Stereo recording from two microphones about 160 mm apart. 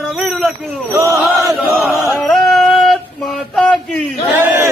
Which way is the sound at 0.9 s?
20° right (ahead or behind).